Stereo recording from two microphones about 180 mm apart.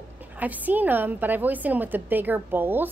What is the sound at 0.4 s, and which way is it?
A woman's voice, 10° right (ahead or behind).